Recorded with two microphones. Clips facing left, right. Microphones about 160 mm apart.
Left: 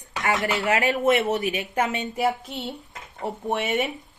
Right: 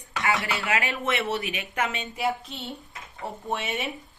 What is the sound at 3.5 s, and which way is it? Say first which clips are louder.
Speech: left 6 dB; 50° left (ahead or behind).